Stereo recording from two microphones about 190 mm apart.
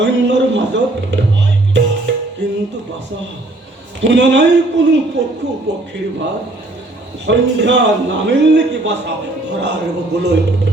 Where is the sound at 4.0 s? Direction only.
70° right (ahead or behind).